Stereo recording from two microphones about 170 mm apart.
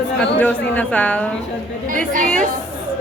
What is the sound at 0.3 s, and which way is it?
A woman's voice, 10° left (ahead or behind).